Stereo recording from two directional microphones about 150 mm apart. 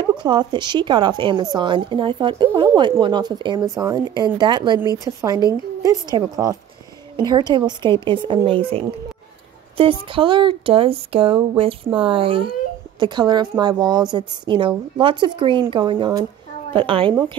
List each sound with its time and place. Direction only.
0.2 s a woman's voice: 30° right (ahead or behind)